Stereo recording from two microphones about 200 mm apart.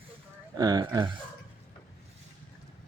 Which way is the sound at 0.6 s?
20° right (ahead or behind).